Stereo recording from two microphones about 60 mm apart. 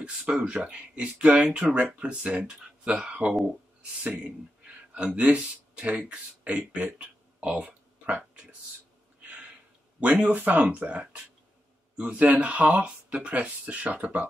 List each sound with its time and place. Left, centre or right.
0.0 s speech: centre
4.6 s speech: centre
7.0 s a sound: right
9.9 s speech: right